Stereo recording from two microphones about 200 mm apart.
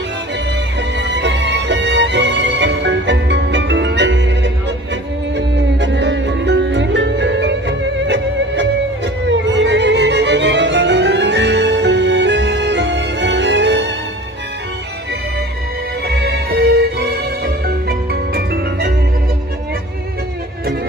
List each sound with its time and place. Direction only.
0.9 s music: 60° right (ahead or behind)
16.3 s music: 55° right (ahead or behind)
17.8 s music: 50° right (ahead or behind)